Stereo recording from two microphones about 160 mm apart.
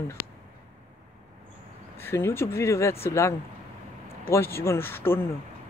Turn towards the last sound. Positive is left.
turn(degrees=15)  # may be behind; listen again after turning